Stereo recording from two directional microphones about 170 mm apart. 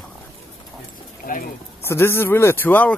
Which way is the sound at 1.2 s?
55° left (ahead or behind).